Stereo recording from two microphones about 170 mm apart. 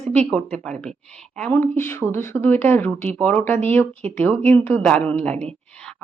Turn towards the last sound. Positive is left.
turn(degrees=5)  # may be behind; listen again after turning